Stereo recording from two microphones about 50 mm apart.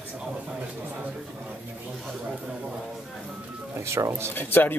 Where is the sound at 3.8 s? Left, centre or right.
Right.